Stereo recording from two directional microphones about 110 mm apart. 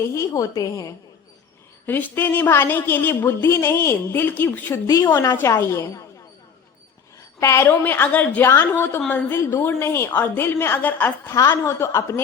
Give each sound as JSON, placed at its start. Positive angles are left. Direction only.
{"t": 0.0, "sound": "a woman's voice", "side_deg": 25}
{"t": 1.9, "sound": "a woman's voice", "side_deg": 15}
{"t": 7.3, "sound": "a woman's voice", "side_deg": 25}